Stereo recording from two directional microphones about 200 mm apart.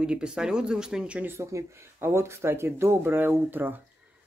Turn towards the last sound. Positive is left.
turn(degrees=-10)  # may be behind; listen again after turning